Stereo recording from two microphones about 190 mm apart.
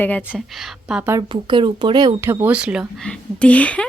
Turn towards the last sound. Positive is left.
turn(degrees=5)  # may be behind; listen again after turning